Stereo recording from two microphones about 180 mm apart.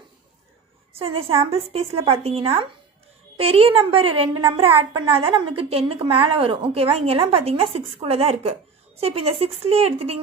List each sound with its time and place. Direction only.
0.9 s a woman's voice: 30° right (ahead or behind)